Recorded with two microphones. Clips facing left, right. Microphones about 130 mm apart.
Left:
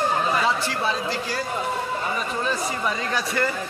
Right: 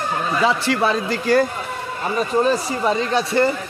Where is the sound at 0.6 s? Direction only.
70° right (ahead or behind).